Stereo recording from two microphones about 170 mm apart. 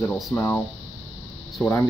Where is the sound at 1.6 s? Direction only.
15° left (ahead or behind).